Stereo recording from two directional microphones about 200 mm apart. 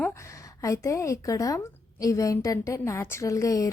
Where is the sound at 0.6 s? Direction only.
15° left (ahead or behind).